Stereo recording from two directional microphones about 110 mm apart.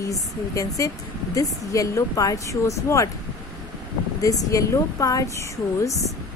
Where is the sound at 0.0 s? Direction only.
30° left (ahead or behind).